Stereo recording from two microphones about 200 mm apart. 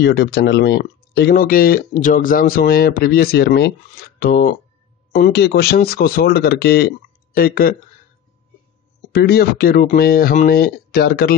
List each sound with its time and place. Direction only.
0.0 s speech: 55° left (ahead or behind)
9.1 s speech: 50° left (ahead or behind)